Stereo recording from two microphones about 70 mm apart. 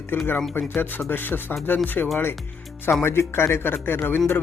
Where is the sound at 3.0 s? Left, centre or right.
Left.